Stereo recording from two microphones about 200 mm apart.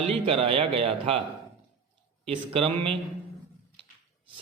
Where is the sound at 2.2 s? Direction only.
30° right (ahead or behind).